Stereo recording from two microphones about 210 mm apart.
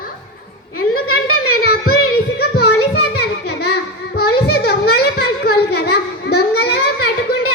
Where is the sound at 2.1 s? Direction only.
50° left (ahead or behind).